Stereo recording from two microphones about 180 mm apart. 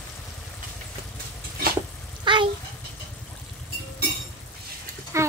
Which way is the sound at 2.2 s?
25° right (ahead or behind).